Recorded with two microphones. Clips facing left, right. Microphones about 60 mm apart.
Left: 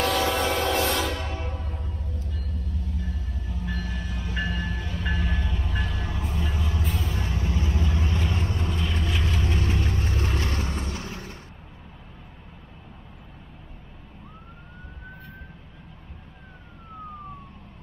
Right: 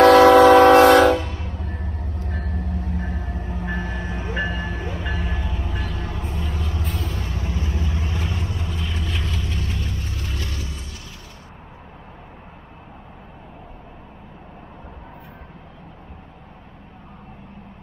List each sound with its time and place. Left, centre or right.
0.0 s train: right
1.6 s music: right
5.0 s music: centre
7.3 s vehicle: right
8.6 s vehicle: centre
9.3 s vehicle: left